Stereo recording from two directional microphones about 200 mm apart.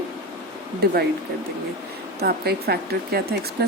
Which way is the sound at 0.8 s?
50° right (ahead or behind).